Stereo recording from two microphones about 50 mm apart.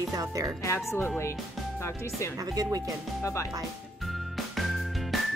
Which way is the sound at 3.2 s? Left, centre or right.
Left.